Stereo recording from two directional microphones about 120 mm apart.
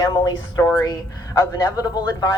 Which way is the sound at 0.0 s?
35° left (ahead or behind).